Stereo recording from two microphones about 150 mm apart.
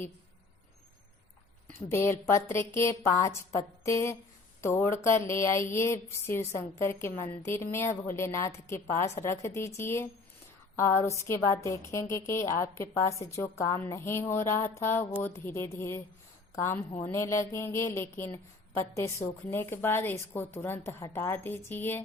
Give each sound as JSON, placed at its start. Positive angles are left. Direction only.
{"t": 1.9, "sound": "a woman's voice", "side_deg": 15}